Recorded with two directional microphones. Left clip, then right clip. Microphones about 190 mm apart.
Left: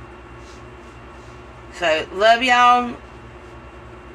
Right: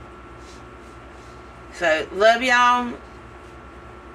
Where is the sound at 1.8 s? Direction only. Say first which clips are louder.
Even; 5° right (ahead or behind).